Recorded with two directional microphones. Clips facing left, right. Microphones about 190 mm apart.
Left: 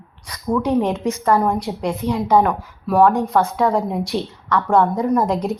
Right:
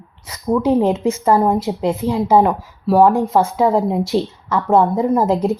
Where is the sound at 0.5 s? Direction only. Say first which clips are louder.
Right 3 dB; 25° right (ahead or behind).